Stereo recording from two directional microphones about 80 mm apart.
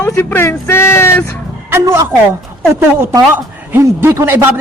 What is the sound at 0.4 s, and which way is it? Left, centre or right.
Speech, left.